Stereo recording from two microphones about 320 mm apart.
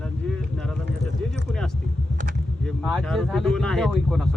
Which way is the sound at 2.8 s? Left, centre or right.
Centre.